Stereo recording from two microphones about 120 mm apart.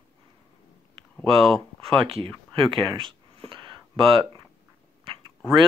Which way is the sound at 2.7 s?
45° right (ahead or behind).